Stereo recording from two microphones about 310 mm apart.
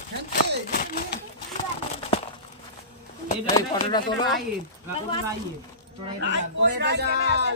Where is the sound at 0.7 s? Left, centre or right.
Left.